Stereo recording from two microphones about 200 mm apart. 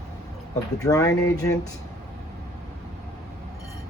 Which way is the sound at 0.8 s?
15° left (ahead or behind).